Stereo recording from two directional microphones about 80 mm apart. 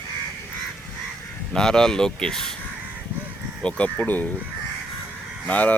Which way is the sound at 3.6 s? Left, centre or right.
Centre.